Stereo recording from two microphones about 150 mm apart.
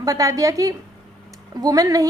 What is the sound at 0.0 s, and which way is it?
A woman's voice, 20° right (ahead or behind).